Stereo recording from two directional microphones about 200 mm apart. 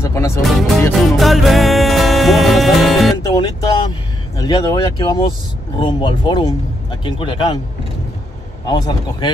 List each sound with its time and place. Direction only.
0.0 s music: 15° left (ahead or behind)
0.4 s speech: centre (ahead or behind)
1.1 s music: centre (ahead or behind)
3.2 s music: 20° left (ahead or behind)
4.4 s speech: 20° left (ahead or behind)
8.6 s speech: 20° left (ahead or behind)